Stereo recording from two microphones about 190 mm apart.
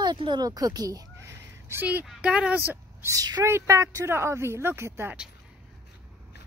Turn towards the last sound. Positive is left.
turn(degrees=-10)  # may be behind; listen again after turning